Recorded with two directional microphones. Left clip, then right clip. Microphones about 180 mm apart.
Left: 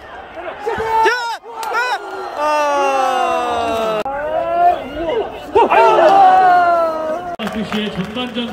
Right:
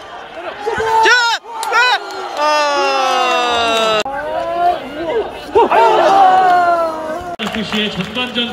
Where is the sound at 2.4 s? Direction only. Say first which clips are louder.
Right 1 dB; 25° left (ahead or behind).